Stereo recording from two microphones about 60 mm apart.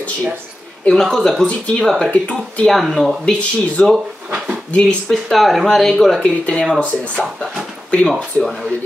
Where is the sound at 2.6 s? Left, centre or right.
Centre.